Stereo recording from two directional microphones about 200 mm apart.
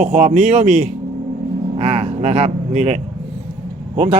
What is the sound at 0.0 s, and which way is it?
Speech, 30° right (ahead or behind).